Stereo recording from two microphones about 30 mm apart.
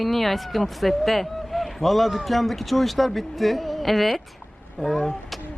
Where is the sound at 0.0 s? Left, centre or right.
Centre.